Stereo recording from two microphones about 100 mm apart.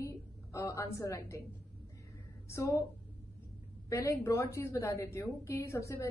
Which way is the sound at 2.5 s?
30° left (ahead or behind).